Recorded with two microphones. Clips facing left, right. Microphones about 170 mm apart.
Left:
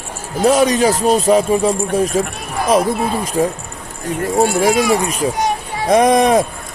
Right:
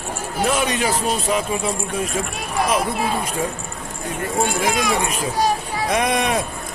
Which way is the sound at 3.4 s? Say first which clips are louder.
Left 7 dB; 35° left (ahead or behind).